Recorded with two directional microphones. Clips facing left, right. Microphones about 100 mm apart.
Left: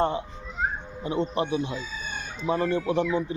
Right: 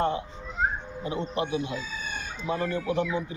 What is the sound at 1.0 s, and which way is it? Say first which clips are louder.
A man's voice: left 4 dB; 30° left (ahead or behind).